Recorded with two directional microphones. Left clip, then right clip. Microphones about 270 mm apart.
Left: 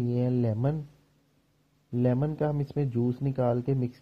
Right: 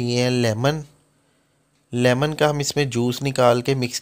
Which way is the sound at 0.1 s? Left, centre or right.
Centre.